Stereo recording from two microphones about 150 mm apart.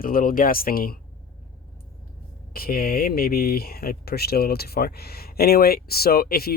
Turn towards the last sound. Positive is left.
turn(degrees=90)